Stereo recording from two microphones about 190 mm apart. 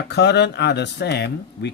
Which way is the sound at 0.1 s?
65° left (ahead or behind).